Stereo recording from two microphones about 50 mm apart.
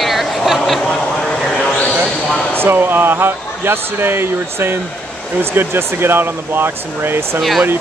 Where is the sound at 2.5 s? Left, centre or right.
Right.